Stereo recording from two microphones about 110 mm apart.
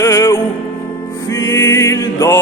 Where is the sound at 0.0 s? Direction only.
30° left (ahead or behind).